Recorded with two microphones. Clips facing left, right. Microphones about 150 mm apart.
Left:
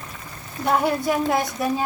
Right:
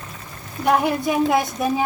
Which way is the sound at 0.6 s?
15° right (ahead or behind).